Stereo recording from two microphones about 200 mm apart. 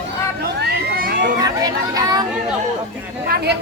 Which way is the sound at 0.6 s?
45° right (ahead or behind).